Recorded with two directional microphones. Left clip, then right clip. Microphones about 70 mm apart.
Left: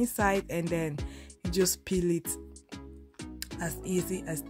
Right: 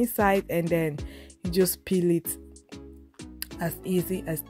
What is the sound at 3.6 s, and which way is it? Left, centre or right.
Speech, right.